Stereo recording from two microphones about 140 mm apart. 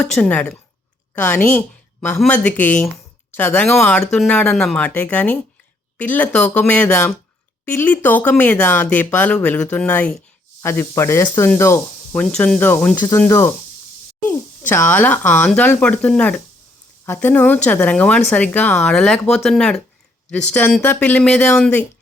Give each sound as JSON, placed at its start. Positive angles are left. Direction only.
{"t": 0.0, "sound": "a woman's voice", "side_deg": 5}
{"t": 12.1, "sound": "a woman's voice", "side_deg": 5}
{"t": 14.7, "sound": "a woman's voice", "side_deg": 15}